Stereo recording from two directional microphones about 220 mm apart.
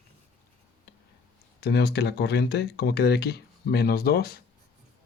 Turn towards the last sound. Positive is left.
turn(degrees=45)  # may be behind; listen again after turning